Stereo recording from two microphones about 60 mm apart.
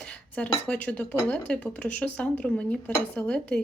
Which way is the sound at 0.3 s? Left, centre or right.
Left.